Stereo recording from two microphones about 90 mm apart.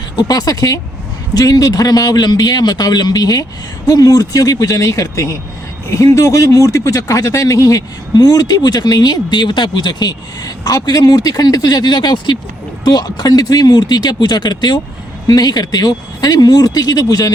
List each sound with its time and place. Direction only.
0.2 s a man's voice: 45° left (ahead or behind)